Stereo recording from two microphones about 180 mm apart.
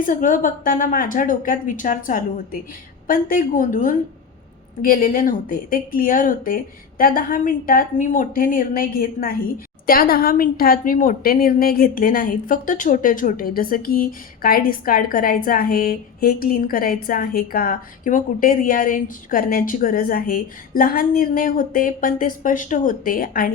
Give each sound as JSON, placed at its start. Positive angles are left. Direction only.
{"t": 0.0, "sound": "a woman's voice", "side_deg": 45}